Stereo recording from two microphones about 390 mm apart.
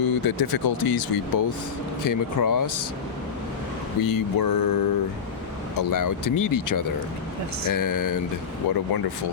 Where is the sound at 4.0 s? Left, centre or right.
Left.